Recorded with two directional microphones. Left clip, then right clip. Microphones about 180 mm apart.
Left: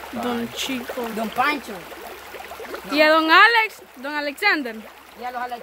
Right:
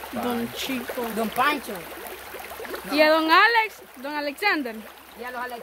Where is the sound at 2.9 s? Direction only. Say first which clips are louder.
Left 3 dB; 10° left (ahead or behind).